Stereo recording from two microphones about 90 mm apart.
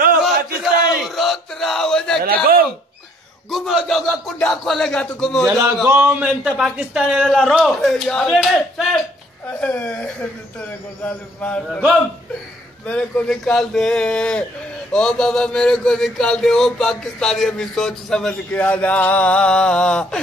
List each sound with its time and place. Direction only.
0.6 s a sound: centre (ahead or behind)
3.4 s speech: centre (ahead or behind)
5.5 s a man's voice: 35° right (ahead or behind)
5.9 s a man's voice: 20° right (ahead or behind)
7.6 s speech: centre (ahead or behind)
9.5 s speech: 15° left (ahead or behind)
12.8 s speech: 10° left (ahead or behind)
18.5 s speech: 15° left (ahead or behind)